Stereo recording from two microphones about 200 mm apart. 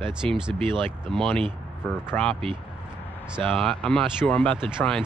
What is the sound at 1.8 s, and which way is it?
Speech, 5° left (ahead or behind).